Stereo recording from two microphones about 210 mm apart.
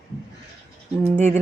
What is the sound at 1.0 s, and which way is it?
Speech, 30° right (ahead or behind).